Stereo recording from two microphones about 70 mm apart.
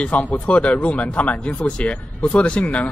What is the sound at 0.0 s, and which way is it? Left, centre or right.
Speech, centre.